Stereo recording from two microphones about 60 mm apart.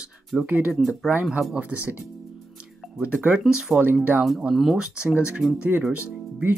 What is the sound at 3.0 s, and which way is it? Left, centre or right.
Speech, right.